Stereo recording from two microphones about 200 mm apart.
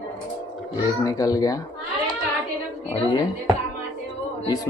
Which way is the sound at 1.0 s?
15° left (ahead or behind).